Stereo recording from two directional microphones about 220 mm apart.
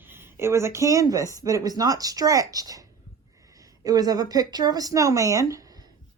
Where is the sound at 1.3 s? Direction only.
15° right (ahead or behind).